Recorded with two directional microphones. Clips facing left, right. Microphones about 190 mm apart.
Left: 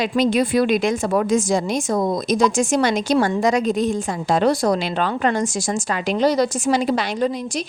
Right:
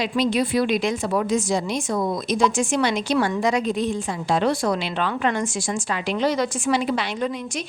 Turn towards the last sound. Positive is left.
turn(degrees=35)  # may be behind; listen again after turning